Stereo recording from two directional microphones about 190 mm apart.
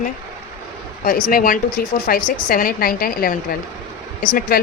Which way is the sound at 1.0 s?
45° left (ahead or behind).